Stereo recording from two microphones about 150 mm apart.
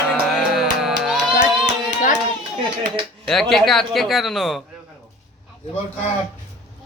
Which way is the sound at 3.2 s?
5° left (ahead or behind).